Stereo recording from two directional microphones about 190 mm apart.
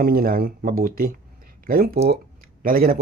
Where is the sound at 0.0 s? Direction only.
50° right (ahead or behind).